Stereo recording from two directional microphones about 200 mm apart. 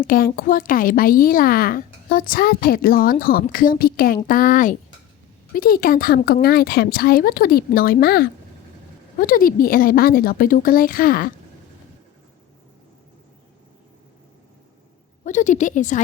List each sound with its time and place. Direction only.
0.1 s a woman's voice: 45° left (ahead or behind)
15.2 s a woman's voice: 40° left (ahead or behind)